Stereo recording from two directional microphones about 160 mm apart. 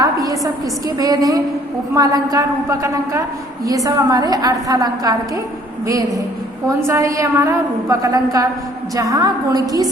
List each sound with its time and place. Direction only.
0.0 s a woman's voice: 20° right (ahead or behind)
6.7 s a woman's voice: 20° right (ahead or behind)